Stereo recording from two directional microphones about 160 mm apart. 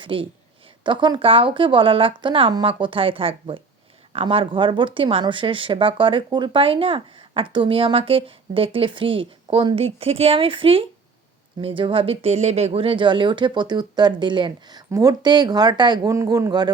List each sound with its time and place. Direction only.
0.0 s speech: 30° right (ahead or behind)